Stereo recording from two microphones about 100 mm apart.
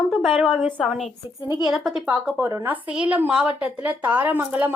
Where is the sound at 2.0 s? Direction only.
15° right (ahead or behind).